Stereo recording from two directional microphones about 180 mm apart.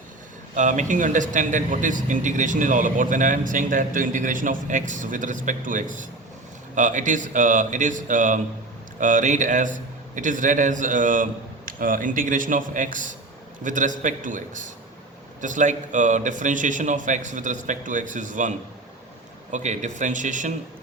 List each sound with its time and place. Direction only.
0.5 s speech: 45° right (ahead or behind)